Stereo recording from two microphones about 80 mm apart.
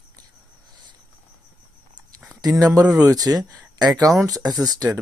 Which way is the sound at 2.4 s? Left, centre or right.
Right.